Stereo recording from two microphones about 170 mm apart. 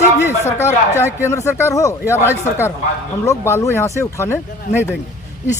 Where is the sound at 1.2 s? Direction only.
15° left (ahead or behind).